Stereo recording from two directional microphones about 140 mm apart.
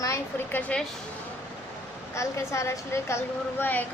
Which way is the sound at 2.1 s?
20° left (ahead or behind).